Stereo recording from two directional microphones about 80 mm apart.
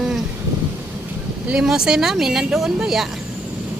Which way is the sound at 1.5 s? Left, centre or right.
Centre.